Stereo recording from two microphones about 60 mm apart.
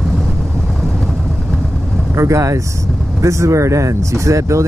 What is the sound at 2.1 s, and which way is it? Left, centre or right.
Speech, right.